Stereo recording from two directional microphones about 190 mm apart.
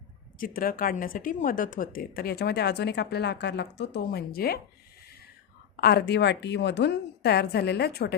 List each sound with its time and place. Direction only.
0.3 s a woman's voice: 50° left (ahead or behind)
5.7 s a woman's voice: 55° left (ahead or behind)